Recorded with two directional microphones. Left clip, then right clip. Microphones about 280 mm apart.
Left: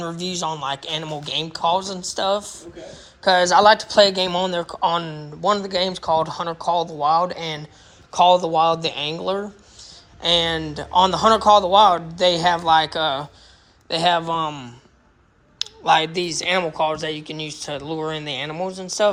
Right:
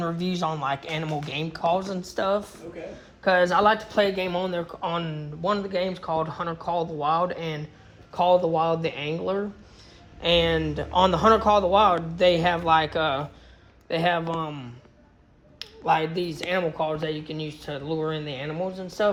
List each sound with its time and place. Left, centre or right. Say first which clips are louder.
0.0 s speech: left 2 dB; centre
15.5 s a sound: left 6 dB; centre
16.5 s speech: left 5 dB; centre